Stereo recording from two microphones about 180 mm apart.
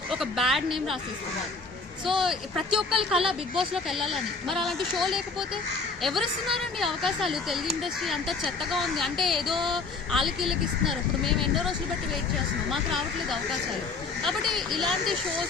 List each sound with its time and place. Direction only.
0.1 s speech: centre (ahead or behind)
2.0 s a woman's voice: centre (ahead or behind)
12.7 s speech: centre (ahead or behind)